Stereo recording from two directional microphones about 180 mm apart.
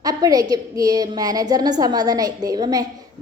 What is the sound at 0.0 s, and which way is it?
A woman's voice, 20° right (ahead or behind).